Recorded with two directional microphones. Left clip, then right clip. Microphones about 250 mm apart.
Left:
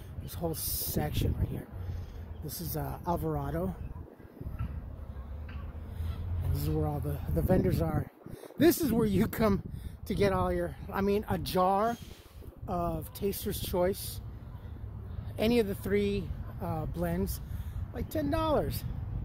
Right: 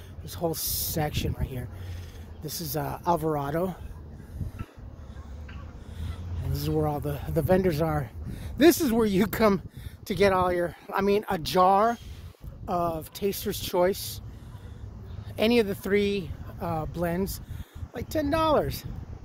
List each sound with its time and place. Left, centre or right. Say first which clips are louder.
0.2 s speech: right 6 dB; right
6.5 s speech: right 7 dB; right
15.3 s speech: right 5 dB; right